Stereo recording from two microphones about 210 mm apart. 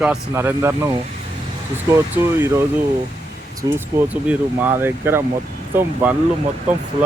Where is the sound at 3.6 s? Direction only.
15° right (ahead or behind).